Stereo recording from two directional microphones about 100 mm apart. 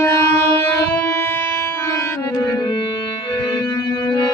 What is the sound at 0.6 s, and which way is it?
Music, 20° left (ahead or behind).